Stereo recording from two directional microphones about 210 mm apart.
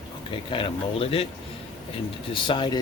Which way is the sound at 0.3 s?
25° left (ahead or behind).